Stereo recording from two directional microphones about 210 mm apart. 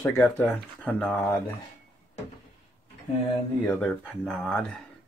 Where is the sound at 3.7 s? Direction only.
5° left (ahead or behind).